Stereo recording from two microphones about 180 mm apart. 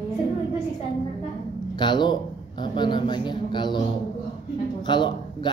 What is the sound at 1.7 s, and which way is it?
A man's voice, 25° left (ahead or behind).